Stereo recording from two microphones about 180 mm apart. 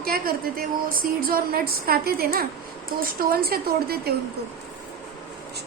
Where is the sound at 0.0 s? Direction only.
55° right (ahead or behind).